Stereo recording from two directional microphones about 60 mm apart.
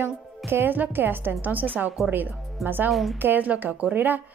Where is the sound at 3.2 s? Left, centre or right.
Right.